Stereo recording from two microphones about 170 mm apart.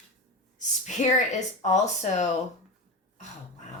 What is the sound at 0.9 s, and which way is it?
Speech, 45° left (ahead or behind).